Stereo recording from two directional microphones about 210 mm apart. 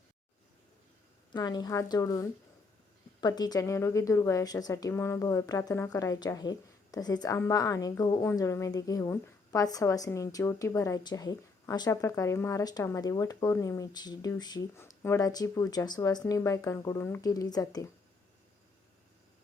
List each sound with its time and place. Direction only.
1.3 s a woman's voice: 20° left (ahead or behind)